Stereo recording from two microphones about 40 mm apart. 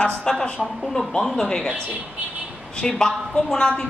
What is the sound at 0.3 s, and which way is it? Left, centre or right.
Speech, centre.